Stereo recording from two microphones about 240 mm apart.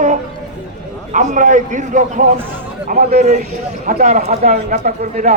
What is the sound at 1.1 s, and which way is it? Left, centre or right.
A man's voice, right.